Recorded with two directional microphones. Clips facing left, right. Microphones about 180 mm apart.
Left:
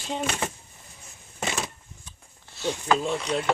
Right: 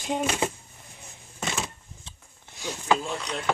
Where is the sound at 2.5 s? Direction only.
10° right (ahead or behind).